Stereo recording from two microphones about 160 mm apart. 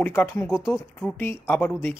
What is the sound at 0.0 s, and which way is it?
Speech, 10° left (ahead or behind).